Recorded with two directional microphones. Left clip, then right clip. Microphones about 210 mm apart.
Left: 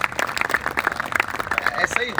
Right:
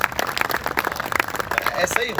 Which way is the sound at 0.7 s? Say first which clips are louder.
Even; 35° right (ahead or behind).